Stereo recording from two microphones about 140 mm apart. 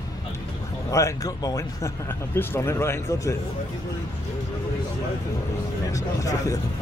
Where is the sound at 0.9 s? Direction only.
20° left (ahead or behind).